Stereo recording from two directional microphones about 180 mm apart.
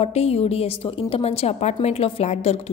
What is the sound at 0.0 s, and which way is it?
A woman's voice, 35° left (ahead or behind).